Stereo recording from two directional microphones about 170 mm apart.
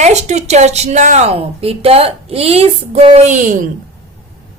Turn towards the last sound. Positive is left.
turn(degrees=-45)  # may be behind; listen again after turning